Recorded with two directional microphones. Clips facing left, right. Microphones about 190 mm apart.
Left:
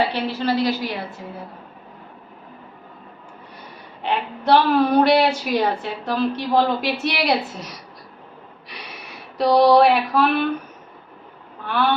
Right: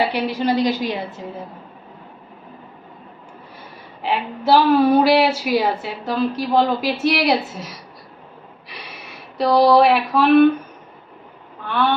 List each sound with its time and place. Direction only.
0.1 s a woman's voice: 15° right (ahead or behind)
4.0 s a woman's voice: 5° right (ahead or behind)
8.7 s a sound: centre (ahead or behind)
11.6 s speech: centre (ahead or behind)